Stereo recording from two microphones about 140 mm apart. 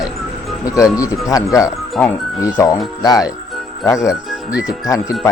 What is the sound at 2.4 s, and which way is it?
Speech, 25° left (ahead or behind).